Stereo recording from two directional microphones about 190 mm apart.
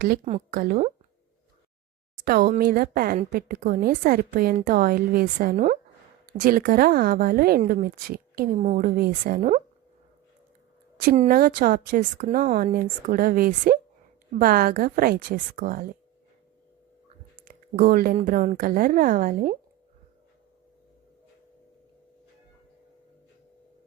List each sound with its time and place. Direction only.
0.5 s a woman's voice: 45° right (ahead or behind)
2.2 s a woman's voice: 50° right (ahead or behind)
11.3 s a woman's voice: 50° right (ahead or behind)
17.4 s a woman's voice: 50° right (ahead or behind)